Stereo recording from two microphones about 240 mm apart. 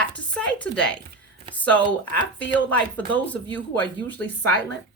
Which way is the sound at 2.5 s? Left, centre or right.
Centre.